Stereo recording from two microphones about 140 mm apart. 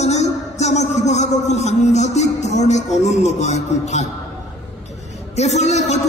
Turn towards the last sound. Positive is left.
turn(degrees=55)  # may be behind; listen again after turning